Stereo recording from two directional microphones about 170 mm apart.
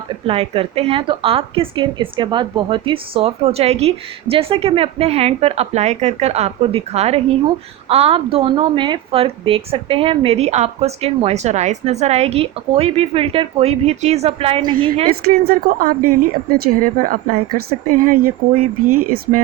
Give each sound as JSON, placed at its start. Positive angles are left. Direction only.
{"t": 0.3, "sound": "a woman's voice", "side_deg": -35}
{"t": 15.1, "sound": "speech", "side_deg": -60}